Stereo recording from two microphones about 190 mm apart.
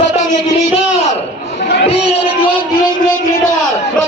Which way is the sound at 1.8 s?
30° left (ahead or behind).